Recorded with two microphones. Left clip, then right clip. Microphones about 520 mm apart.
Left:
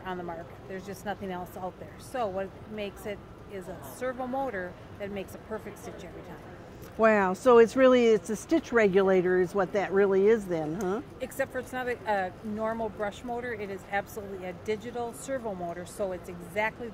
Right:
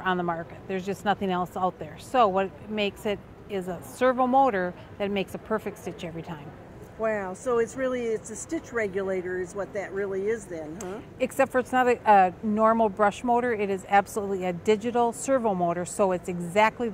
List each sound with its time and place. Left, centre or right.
0.0 s speech: right
7.0 s speech: left
11.1 s speech: right